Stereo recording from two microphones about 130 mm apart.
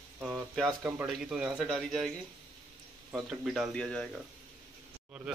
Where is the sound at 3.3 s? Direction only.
5° right (ahead or behind).